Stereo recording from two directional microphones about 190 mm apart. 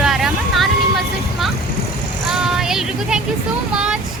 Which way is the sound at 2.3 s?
5° right (ahead or behind).